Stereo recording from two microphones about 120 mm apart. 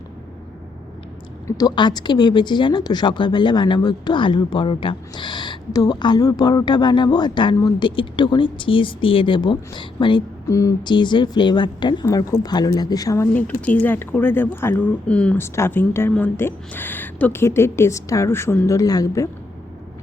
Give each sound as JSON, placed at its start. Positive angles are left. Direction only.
{"t": 1.5, "sound": "speech", "side_deg": 30}
{"t": 10.5, "sound": "a woman's voice", "side_deg": 25}
{"t": 10.8, "sound": "speech", "side_deg": 40}
{"t": 12.0, "sound": "speech", "side_deg": 25}
{"t": 13.3, "sound": "a woman's voice", "side_deg": 10}